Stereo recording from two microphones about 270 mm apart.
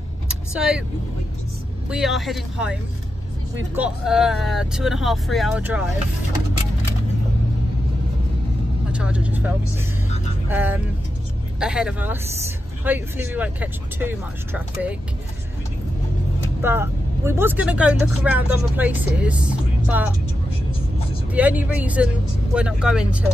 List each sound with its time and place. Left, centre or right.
0.3 s vehicle: centre
1.9 s speech: centre
8.9 s speech: centre
16.6 s speech: centre
21.3 s speech: centre